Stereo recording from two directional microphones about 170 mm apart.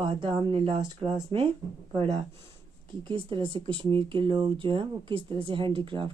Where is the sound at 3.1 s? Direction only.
30° right (ahead or behind).